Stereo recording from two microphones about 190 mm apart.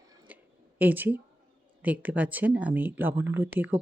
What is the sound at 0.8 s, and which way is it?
Speech, 10° right (ahead or behind).